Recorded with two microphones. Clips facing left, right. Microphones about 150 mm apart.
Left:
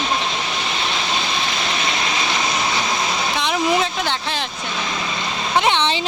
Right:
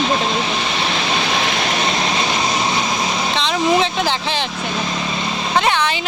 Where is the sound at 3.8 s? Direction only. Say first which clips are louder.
Right 3 dB; centre (ahead or behind).